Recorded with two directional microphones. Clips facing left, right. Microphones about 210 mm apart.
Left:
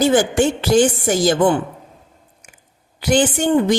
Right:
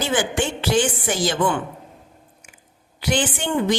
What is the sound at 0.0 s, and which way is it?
A woman's voice, 40° left (ahead or behind).